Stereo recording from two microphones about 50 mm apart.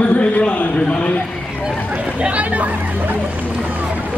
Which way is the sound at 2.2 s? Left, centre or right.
Right.